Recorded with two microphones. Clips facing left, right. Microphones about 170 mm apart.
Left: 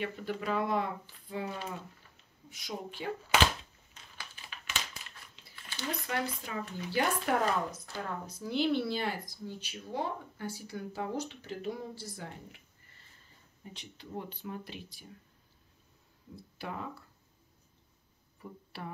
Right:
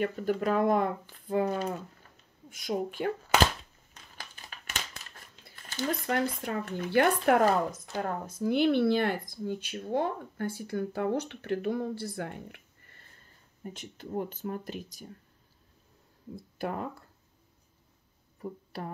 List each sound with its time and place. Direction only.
0.0 s speech: 45° right (ahead or behind)
4.2 s crumpling: 45° right (ahead or behind)
7.9 s speech: 50° right (ahead or behind)
13.7 s speech: 45° right (ahead or behind)
16.5 s speech: 50° right (ahead or behind)
18.4 s a sound: 40° right (ahead or behind)